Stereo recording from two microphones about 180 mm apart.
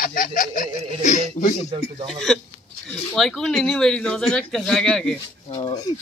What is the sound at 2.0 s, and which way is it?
Speech, centre (ahead or behind).